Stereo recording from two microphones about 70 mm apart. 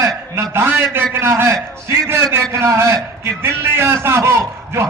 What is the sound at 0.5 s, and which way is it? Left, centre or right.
A man's voice, right.